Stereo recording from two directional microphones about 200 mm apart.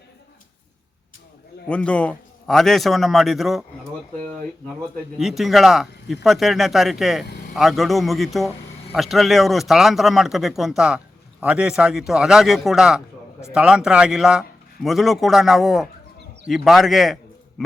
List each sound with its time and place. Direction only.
1.6 s a man's voice: 5° left (ahead or behind)
5.1 s a man's voice: centre (ahead or behind)
7.3 s vehicle: 55° left (ahead or behind)
7.5 s a man's voice: centre (ahead or behind)